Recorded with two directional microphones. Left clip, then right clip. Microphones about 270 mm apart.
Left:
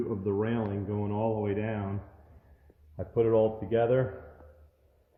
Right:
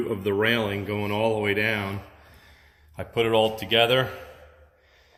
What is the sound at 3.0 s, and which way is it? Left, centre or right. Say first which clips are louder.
Speech: right 3 dB; centre.